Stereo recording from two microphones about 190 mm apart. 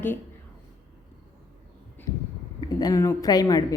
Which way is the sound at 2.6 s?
20° left (ahead or behind).